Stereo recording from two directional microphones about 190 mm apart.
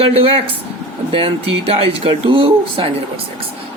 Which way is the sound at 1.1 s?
30° right (ahead or behind).